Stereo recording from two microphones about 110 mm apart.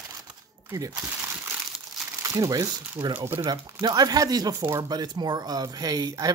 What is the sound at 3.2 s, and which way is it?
Speech, 25° right (ahead or behind).